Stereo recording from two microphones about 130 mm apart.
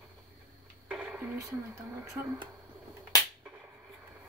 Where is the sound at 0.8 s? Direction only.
5° right (ahead or behind).